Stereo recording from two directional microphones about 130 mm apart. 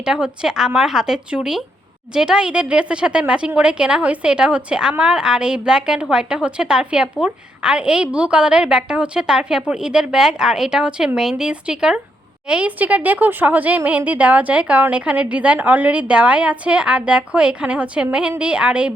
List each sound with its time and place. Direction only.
0.0 s a woman's voice: 5° right (ahead or behind)